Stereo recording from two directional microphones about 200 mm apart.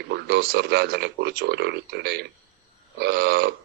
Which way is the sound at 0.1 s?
55° right (ahead or behind).